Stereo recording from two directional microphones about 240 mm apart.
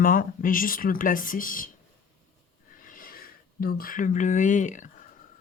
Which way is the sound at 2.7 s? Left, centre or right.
Left.